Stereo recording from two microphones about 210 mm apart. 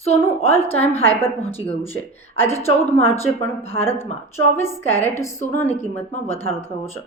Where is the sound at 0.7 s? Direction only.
30° left (ahead or behind).